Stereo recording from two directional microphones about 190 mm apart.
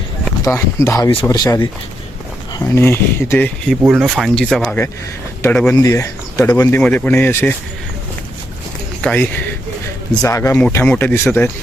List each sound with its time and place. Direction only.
0.5 s speech: 15° left (ahead or behind)
3.8 s speech: centre (ahead or behind)
9.0 s speech: 5° left (ahead or behind)